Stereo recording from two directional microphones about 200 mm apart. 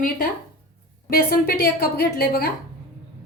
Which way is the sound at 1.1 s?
50° left (ahead or behind).